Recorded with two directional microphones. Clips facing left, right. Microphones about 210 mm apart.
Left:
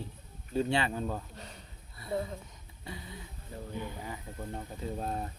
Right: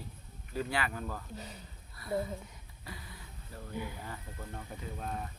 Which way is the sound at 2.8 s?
25° left (ahead or behind).